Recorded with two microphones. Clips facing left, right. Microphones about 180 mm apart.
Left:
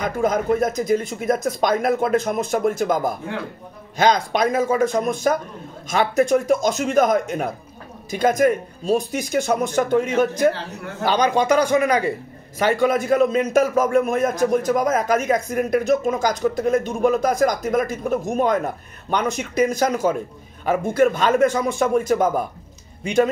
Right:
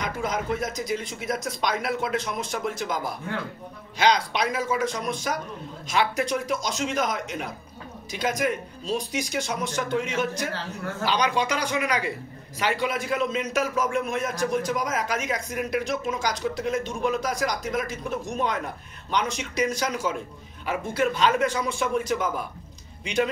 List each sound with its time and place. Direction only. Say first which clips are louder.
0.0 s a man's voice: left 8 dB; 50° left (ahead or behind)